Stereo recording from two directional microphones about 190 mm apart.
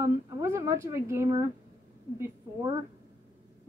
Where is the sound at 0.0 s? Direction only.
15° right (ahead or behind).